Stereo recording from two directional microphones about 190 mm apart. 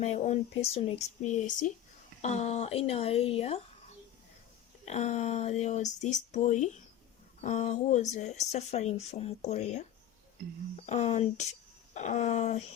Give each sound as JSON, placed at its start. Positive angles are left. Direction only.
{"t": 0.0, "sound": "speech", "side_deg": 35}
{"t": 4.9, "sound": "speech", "side_deg": 35}
{"t": 10.8, "sound": "speech", "side_deg": 35}